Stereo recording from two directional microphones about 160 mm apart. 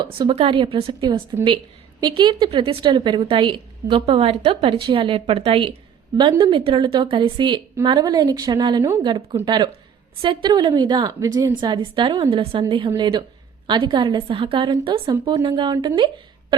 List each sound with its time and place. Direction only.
0.0 s a woman's voice: 30° right (ahead or behind)